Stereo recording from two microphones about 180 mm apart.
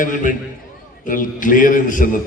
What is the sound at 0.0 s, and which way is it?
A man's voice, 45° left (ahead or behind).